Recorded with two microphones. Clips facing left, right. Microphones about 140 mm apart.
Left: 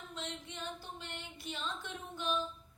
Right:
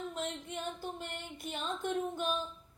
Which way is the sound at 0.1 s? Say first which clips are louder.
Right 6 dB; 50° right (ahead or behind).